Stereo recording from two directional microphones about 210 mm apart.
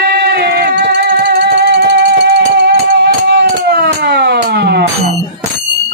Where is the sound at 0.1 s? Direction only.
50° right (ahead or behind).